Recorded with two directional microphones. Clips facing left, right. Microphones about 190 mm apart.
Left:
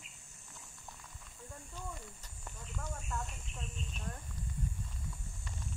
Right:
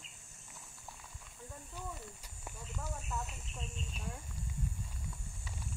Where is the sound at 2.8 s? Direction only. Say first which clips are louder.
Even; 5° right (ahead or behind).